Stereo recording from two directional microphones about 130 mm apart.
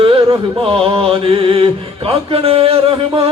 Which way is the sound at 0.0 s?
45° right (ahead or behind).